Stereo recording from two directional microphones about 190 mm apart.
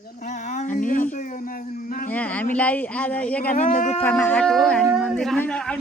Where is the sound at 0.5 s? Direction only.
40° left (ahead or behind).